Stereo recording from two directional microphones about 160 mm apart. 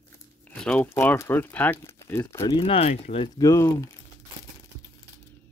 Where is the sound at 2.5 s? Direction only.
35° left (ahead or behind).